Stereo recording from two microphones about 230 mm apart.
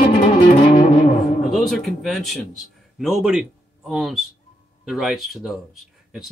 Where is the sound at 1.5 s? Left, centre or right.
Centre.